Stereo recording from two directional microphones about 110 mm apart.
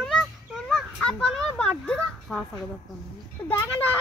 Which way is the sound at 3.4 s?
15° left (ahead or behind).